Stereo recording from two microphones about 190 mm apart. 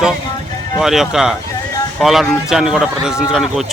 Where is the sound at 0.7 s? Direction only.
Centre (ahead or behind).